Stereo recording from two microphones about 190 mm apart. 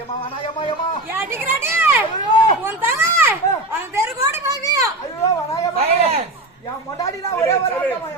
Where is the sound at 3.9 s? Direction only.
15° right (ahead or behind).